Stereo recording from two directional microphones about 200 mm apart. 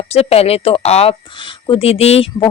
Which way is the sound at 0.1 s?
30° left (ahead or behind).